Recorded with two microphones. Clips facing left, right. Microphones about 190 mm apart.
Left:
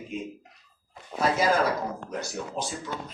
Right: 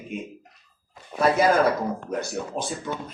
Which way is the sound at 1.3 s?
55° right (ahead or behind).